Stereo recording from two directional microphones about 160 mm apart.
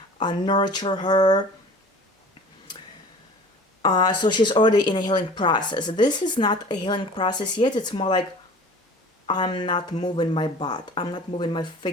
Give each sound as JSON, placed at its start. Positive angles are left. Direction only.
{"t": 0.2, "sound": "speech", "side_deg": 30}
{"t": 3.8, "sound": "speech", "side_deg": 25}
{"t": 9.2, "sound": "speech", "side_deg": 30}